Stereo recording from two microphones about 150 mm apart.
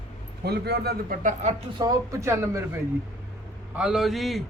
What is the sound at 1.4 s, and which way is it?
Speech, 50° right (ahead or behind).